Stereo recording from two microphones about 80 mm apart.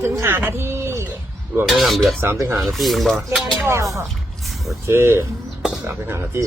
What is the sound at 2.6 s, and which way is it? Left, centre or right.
Speech, centre.